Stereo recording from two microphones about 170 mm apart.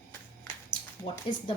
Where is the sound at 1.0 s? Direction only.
35° left (ahead or behind).